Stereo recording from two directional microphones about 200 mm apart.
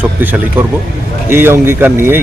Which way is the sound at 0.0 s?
10° right (ahead or behind).